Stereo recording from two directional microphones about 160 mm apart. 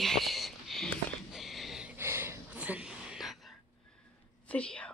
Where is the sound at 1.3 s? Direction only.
Centre (ahead or behind).